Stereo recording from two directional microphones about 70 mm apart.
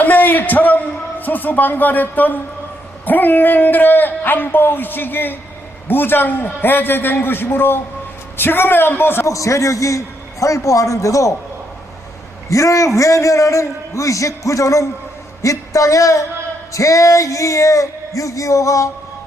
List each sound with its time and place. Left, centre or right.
0.0 s a sound: left
1.2 s a man's voice: left
9.2 s a man's voice: left
12.5 s a man's voice: left